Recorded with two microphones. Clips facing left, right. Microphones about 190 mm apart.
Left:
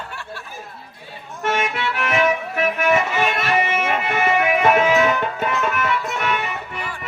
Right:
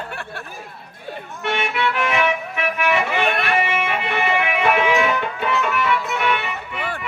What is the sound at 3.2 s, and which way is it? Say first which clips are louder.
Music: even; 60° right (ahead or behind).